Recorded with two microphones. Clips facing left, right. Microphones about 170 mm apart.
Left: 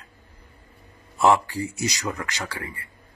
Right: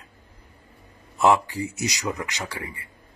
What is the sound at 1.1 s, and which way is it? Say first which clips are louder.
Speech: even; 20° right (ahead or behind).